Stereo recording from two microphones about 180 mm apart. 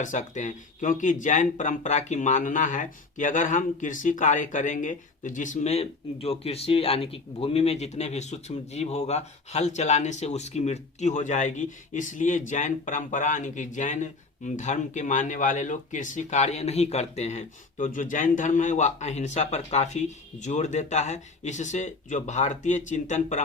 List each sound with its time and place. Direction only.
0.0 s speech: 45° left (ahead or behind)